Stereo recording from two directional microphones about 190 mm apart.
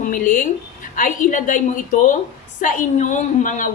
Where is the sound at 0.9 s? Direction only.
45° left (ahead or behind).